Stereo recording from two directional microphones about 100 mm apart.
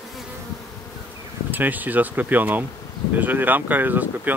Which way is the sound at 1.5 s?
20° right (ahead or behind).